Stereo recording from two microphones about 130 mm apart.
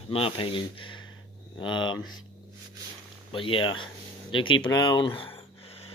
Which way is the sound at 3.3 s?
40° left (ahead or behind).